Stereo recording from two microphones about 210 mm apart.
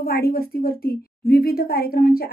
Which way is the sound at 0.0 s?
45° left (ahead or behind).